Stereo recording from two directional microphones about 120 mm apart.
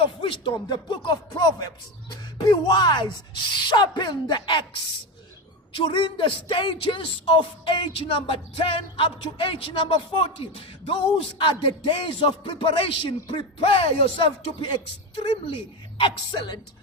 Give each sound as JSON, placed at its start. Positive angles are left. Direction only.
{"t": 0.2, "sound": "speech", "side_deg": 45}
{"t": 5.7, "sound": "speech", "side_deg": 45}